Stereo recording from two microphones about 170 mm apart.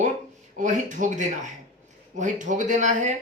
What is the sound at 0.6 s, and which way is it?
Speech, 45° right (ahead or behind).